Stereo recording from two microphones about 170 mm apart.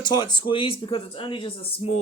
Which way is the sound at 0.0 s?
25° left (ahead or behind).